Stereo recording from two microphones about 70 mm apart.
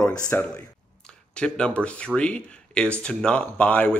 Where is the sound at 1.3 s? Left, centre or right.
Centre.